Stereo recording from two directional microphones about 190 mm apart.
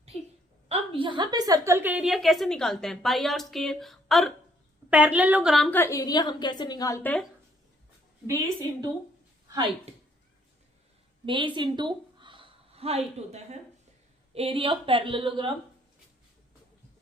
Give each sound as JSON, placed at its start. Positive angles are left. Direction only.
{"t": 0.7, "sound": "a woman's voice", "side_deg": -25}
{"t": 5.8, "sound": "a woman's voice", "side_deg": 20}
{"t": 11.3, "sound": "a woman's voice", "side_deg": -25}